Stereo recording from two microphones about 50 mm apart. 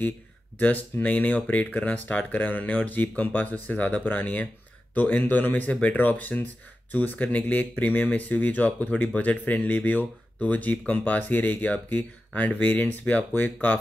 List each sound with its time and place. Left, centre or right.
0.6 s speech: left